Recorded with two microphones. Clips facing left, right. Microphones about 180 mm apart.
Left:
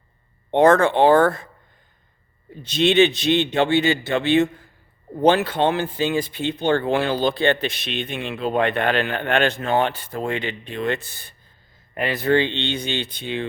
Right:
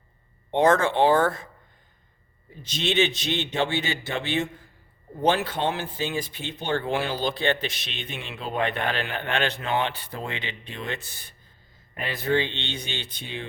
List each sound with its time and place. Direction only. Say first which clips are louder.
0.5 s speech: left 5 dB; 55° left (ahead or behind)
2.6 s speech: left 8 dB; 60° left (ahead or behind)